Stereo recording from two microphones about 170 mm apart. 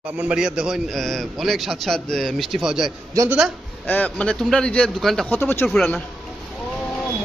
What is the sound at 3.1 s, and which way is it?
Speech, 15° right (ahead or behind).